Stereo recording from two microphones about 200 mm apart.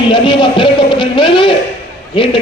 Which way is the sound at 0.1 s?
25° left (ahead or behind).